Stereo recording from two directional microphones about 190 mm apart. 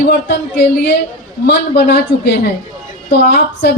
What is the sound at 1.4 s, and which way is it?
A woman's voice, 55° left (ahead or behind).